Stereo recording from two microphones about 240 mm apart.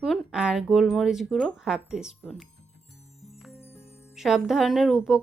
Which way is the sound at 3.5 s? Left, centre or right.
Centre.